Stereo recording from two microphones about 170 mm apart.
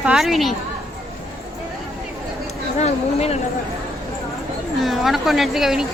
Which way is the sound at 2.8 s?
40° left (ahead or behind).